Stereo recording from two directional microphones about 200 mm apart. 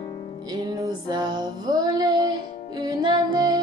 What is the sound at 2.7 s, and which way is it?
Music, 20° right (ahead or behind).